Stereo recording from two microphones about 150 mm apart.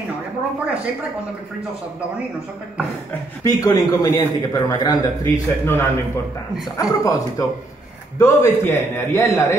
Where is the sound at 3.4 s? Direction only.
20° left (ahead or behind).